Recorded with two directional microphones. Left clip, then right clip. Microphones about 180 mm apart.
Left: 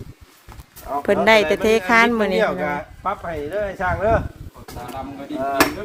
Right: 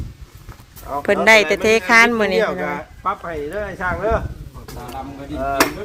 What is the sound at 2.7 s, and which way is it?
Speech, 65° left (ahead or behind).